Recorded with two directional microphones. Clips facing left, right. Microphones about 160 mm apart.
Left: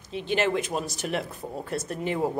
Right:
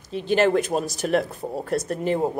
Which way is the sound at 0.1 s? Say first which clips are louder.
Right 6 dB; 40° right (ahead or behind).